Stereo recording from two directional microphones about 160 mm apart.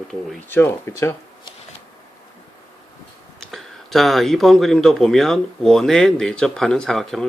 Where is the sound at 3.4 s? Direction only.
Centre (ahead or behind).